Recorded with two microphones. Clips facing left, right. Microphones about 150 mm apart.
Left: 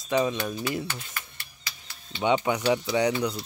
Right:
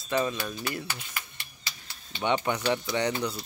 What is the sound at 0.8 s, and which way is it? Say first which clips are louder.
Speech: left 1 dB; 15° right (ahead or behind).